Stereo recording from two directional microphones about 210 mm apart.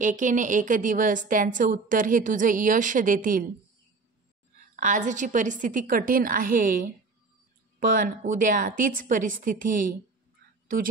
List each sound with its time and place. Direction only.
0.0 s a woman's voice: 40° right (ahead or behind)
4.7 s a woman's voice: 35° right (ahead or behind)